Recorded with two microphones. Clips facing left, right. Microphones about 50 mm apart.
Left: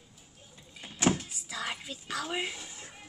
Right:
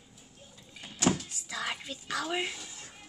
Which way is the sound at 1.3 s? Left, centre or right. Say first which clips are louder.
Right 1 dB; centre.